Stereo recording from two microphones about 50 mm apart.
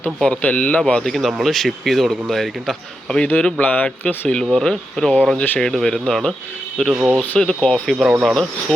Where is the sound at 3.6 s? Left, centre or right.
Left.